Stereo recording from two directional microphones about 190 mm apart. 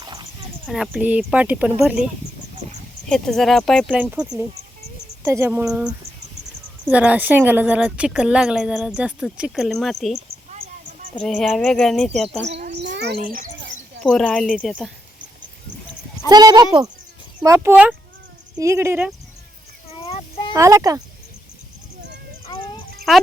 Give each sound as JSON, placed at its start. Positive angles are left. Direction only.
{"t": 0.0, "sound": "horse", "side_deg": -20}
{"t": 0.7, "sound": "speech", "side_deg": -5}
{"t": 3.1, "sound": "speech", "side_deg": 0}
{"t": 11.2, "sound": "speech", "side_deg": 0}
{"t": 12.7, "sound": "a sound", "side_deg": -65}
{"t": 13.2, "sound": "a child's voice", "side_deg": -45}
{"t": 14.0, "sound": "speech", "side_deg": 5}
{"t": 16.3, "sound": "speech", "side_deg": -20}
{"t": 20.0, "sound": "a sound", "side_deg": 30}
{"t": 20.5, "sound": "speech", "side_deg": -15}
{"t": 22.4, "sound": "a sound", "side_deg": 25}
{"t": 23.1, "sound": "speech", "side_deg": 0}